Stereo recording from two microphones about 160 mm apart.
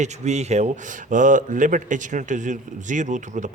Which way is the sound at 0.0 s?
45° right (ahead or behind).